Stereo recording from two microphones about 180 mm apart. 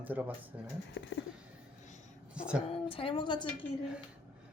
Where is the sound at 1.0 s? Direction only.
85° left.